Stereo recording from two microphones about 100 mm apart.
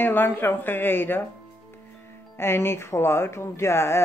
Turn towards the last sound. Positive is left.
turn(degrees=25)  # may be behind; listen again after turning